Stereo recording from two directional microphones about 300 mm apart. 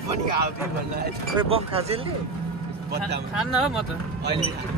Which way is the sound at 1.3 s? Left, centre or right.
Centre.